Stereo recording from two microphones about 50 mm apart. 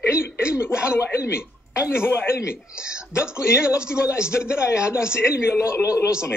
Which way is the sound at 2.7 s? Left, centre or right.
Centre.